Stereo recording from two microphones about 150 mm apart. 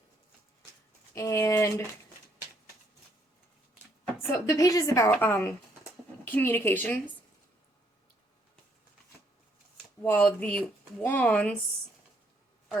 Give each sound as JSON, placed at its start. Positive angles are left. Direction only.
{"t": 1.1, "sound": "a woman's voice", "side_deg": 20}
{"t": 4.2, "sound": "a woman's voice", "side_deg": 20}
{"t": 10.0, "sound": "speech", "side_deg": 10}